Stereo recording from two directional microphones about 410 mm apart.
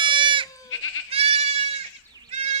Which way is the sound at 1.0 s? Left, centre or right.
Centre.